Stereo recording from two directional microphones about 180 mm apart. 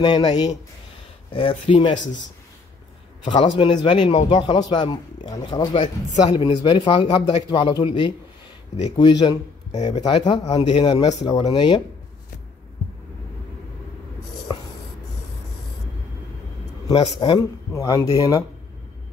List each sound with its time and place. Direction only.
0.0 s speech: 25° left (ahead or behind)
3.3 s speech: 25° left (ahead or behind)
17.0 s speech: 30° left (ahead or behind)
17.4 s speech: 20° left (ahead or behind)